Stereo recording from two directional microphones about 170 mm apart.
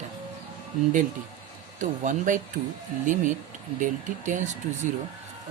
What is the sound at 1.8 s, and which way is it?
Speech, 50° right (ahead or behind).